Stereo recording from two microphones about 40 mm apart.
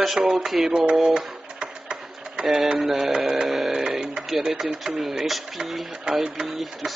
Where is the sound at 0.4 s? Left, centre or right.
Centre.